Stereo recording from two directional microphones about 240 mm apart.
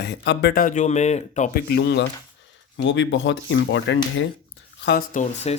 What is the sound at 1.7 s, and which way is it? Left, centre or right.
Speech, left.